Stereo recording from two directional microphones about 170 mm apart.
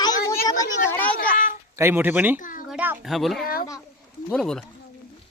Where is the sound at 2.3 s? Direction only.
50° left (ahead or behind).